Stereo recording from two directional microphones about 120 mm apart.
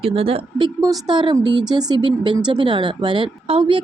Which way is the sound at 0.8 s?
40° right (ahead or behind).